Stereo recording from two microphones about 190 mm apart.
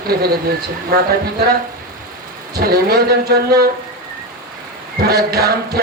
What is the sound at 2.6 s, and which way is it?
A man's voice, 50° right (ahead or behind).